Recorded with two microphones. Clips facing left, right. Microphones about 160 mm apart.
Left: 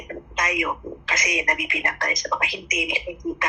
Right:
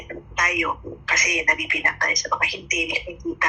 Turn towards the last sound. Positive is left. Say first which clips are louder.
# even
turn(degrees=20)  # may be behind; listen again after turning